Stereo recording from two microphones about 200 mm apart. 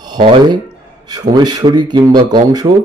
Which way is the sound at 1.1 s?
20° right (ahead or behind).